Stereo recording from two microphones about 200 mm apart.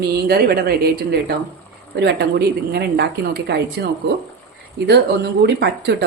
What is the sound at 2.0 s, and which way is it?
Speech, 55° right (ahead or behind).